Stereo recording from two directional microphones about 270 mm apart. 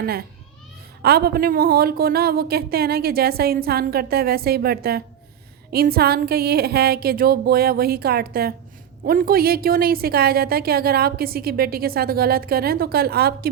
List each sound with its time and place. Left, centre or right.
0.0 s a woman's voice: right